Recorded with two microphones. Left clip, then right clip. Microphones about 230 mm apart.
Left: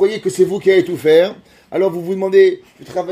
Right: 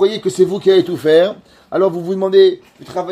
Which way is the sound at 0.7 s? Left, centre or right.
Centre.